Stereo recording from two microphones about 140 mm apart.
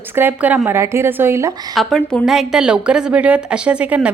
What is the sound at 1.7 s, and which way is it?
A woman's voice, 5° left (ahead or behind).